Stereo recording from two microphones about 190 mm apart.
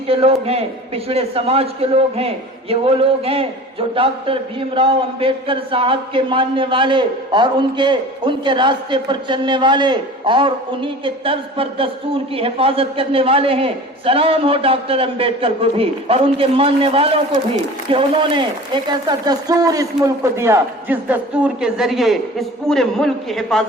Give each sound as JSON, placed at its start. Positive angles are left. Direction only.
{"t": 0.1, "sound": "a man's voice", "side_deg": -30}